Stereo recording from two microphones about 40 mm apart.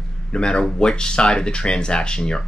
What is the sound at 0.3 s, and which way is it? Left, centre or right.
Speech, left.